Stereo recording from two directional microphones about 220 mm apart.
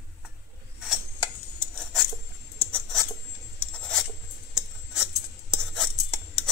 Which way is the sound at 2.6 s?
5° left (ahead or behind).